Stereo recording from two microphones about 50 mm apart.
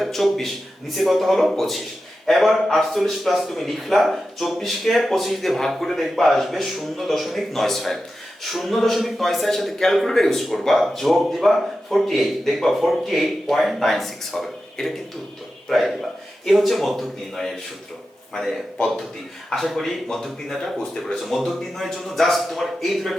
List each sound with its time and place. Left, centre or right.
0.0 s a man's voice: centre